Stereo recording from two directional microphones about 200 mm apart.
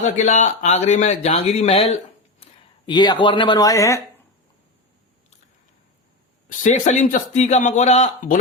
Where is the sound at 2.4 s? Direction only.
30° left (ahead or behind).